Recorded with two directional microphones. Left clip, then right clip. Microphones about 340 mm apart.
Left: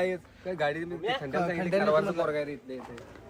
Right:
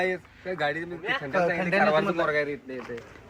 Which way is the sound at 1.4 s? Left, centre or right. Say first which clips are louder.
Right 4 dB; centre.